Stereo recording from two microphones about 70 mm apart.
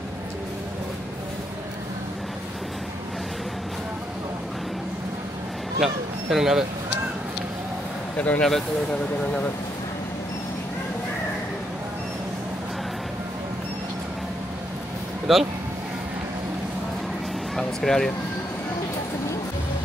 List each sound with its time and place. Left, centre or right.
6.3 s speech: centre
8.2 s speech: left
15.3 s speech: centre
17.6 s speech: centre